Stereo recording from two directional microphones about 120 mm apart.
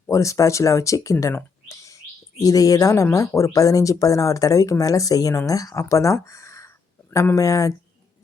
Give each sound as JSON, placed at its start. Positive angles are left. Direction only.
{"t": 0.1, "sound": "speech", "side_deg": 25}